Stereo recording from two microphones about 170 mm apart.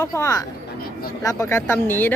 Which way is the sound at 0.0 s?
20° left (ahead or behind).